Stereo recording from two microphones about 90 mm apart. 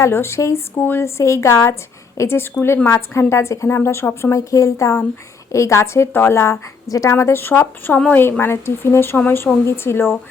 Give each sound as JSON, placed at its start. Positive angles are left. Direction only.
{"t": 0.0, "sound": "a woman's voice", "side_deg": 30}
{"t": 7.9, "sound": "a woman's voice", "side_deg": 15}
{"t": 8.2, "sound": "speech", "side_deg": 25}